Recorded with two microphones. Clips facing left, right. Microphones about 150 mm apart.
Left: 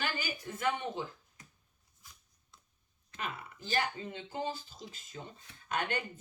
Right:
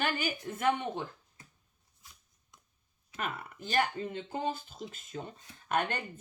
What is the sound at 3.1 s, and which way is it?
Speech, 60° right (ahead or behind).